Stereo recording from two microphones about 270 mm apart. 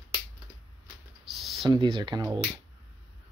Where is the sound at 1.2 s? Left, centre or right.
Centre.